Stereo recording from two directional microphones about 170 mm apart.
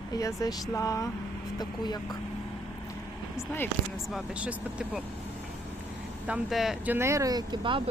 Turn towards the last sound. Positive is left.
turn(degrees=-30)  # may be behind; listen again after turning